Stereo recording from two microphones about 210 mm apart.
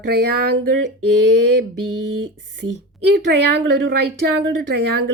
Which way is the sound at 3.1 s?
50° right (ahead or behind).